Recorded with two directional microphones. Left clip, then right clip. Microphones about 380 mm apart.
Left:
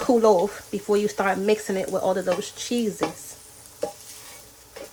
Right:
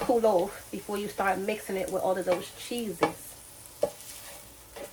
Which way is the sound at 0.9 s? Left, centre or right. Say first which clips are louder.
Left 5 dB; left.